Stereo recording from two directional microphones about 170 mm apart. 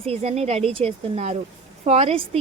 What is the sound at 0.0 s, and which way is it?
A woman's voice, 35° right (ahead or behind).